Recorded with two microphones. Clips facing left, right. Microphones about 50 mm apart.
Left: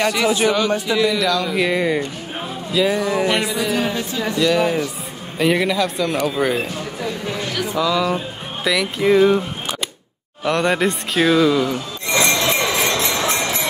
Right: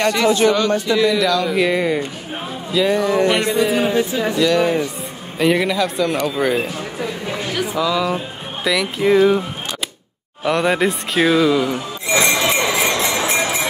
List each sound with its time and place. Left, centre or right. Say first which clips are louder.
0.0 s a man's voice: right 2 dB; centre
3.8 s speech: right 5 dB; right
4.4 s a man's voice: right 1 dB; centre
7.3 s music: right 2 dB; centre
8.6 s a man's voice: even; centre
10.4 s a man's voice: right 1 dB; centre
12.2 s jingle bell: right 1 dB; centre